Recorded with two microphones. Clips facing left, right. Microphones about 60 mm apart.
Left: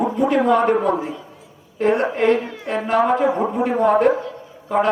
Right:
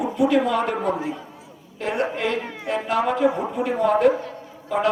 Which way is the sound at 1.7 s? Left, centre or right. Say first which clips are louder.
Left 7 dB; left.